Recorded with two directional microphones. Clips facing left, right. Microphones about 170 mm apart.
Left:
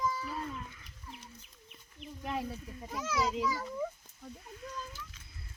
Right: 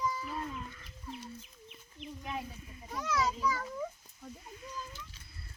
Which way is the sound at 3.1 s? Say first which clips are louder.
Even; 10° left (ahead or behind).